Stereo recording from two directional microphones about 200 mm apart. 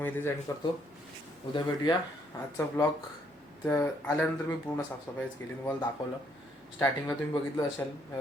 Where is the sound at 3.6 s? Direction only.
15° left (ahead or behind).